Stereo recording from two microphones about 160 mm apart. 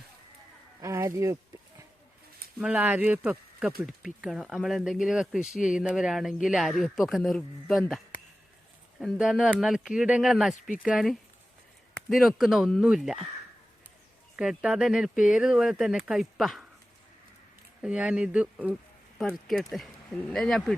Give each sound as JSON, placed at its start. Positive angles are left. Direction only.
{"t": 0.8, "sound": "speech", "side_deg": -15}
{"t": 2.6, "sound": "speech", "side_deg": -10}
{"t": 14.3, "sound": "speech", "side_deg": -5}
{"t": 17.8, "sound": "speech", "side_deg": -5}